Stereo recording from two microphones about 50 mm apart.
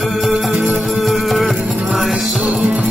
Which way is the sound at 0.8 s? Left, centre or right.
Centre.